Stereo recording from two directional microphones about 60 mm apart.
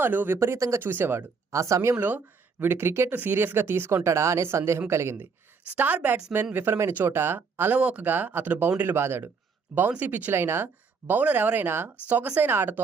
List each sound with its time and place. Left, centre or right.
0.0 s speech: right
0.3 s speech: right
1.5 s speech: right
2.0 s speech: right
5.7 s speech: right
7.8 s speech: right
8.0 s speech: right
10.0 s speech: right
10.3 s speech: right
11.0 s speech: right
12.0 s speech: right
12.4 s speech: right